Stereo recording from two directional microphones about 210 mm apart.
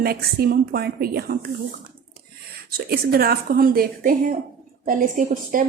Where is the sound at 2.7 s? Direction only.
45° right (ahead or behind).